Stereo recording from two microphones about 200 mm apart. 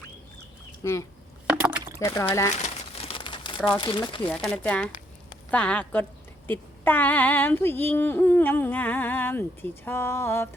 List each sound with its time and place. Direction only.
0.8 s female singing: 15° left (ahead or behind)
1.5 s rowboat: 5° right (ahead or behind)
2.0 s female singing: 15° left (ahead or behind)
2.6 s crumpling: 30° left (ahead or behind)
3.7 s speech: 20° left (ahead or behind)
4.3 s female singing: 5° left (ahead or behind)